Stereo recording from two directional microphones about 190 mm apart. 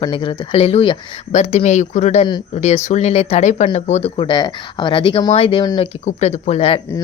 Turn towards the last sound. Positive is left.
turn(degrees=30)  # may be behind; listen again after turning